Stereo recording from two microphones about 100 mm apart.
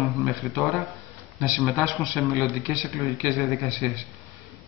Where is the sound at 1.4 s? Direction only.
10° right (ahead or behind).